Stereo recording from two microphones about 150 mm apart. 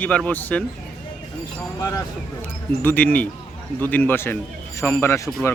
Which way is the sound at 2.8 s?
10° left (ahead or behind).